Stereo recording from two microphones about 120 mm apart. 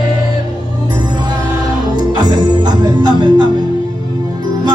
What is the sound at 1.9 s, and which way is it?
Music, 35° right (ahead or behind).